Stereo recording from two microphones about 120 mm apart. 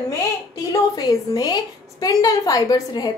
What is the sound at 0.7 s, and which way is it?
A woman's voice, 35° left (ahead or behind).